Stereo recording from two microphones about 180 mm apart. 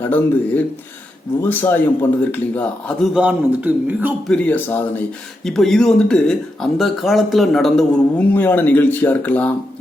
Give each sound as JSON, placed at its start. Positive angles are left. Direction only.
{"t": 0.0, "sound": "speech", "side_deg": 10}
{"t": 3.2, "sound": "a man's voice", "side_deg": -10}
{"t": 4.3, "sound": "speech", "side_deg": 10}